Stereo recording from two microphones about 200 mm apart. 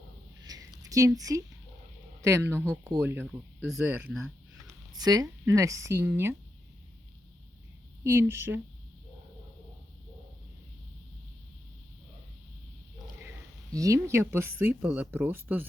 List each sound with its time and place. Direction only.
0.4 s a sound: 20° right (ahead or behind)
2.2 s speech: 15° right (ahead or behind)
4.6 s speech: 20° right (ahead or behind)
8.0 s speech: 10° right (ahead or behind)
13.7 s speech: 15° right (ahead or behind)